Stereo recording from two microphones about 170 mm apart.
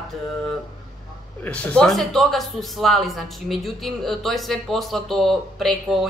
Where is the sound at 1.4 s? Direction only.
5° left (ahead or behind).